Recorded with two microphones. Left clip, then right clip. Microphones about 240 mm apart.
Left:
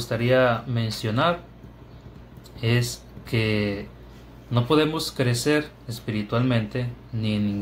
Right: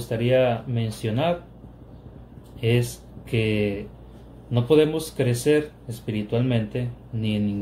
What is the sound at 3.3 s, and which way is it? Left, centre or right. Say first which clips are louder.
Speech: right 1 dB; left.